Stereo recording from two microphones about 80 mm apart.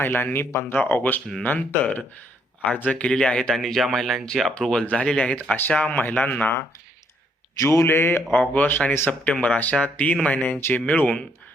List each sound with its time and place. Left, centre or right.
0.0 s speech: left
7.6 s speech: left
8.3 s speech: centre